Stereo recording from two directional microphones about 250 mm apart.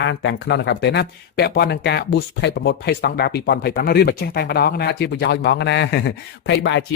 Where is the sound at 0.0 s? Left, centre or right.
Left.